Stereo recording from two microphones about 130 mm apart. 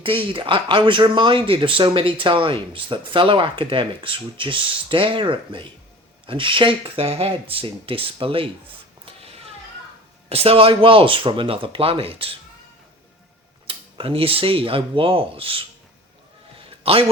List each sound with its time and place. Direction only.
0.0 s speech: 40° right (ahead or behind)
10.2 s speech: 50° right (ahead or behind)
13.7 s speech: 45° right (ahead or behind)
16.6 s a sound: 45° right (ahead or behind)